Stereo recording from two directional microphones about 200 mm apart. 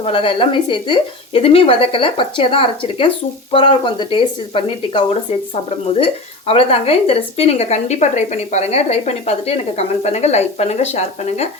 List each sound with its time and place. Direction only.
0.0 s speech: 25° left (ahead or behind)
6.5 s speech: 30° left (ahead or behind)